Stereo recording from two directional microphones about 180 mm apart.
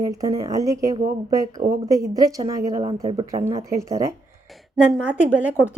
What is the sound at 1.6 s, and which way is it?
Speech, 55° right (ahead or behind).